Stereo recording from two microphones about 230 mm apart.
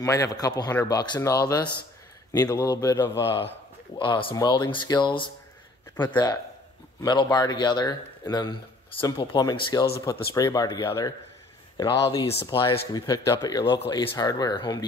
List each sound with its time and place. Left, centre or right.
0.0 s speech: centre